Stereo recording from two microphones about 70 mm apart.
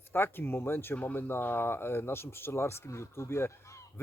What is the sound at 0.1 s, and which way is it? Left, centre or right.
Speech, left.